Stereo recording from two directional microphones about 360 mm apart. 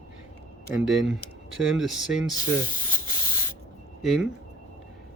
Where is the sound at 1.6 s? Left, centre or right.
Centre.